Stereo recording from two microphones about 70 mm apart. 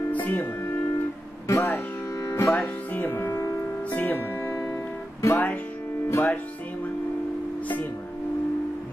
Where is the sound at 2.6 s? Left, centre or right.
Left.